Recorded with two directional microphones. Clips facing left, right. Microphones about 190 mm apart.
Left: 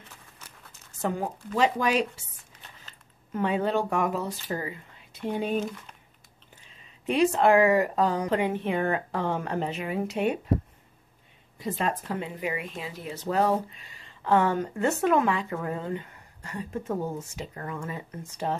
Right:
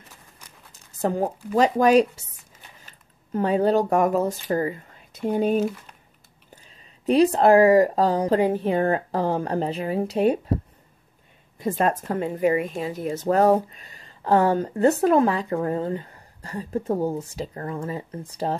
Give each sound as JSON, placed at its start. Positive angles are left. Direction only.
{"t": 1.0, "sound": "speech", "side_deg": -40}
{"t": 3.3, "sound": "speech", "side_deg": -40}
{"t": 11.6, "sound": "speech", "side_deg": -50}